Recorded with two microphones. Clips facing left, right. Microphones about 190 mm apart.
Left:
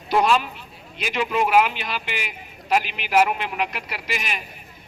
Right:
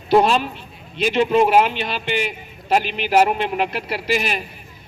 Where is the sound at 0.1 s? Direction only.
30° right (ahead or behind).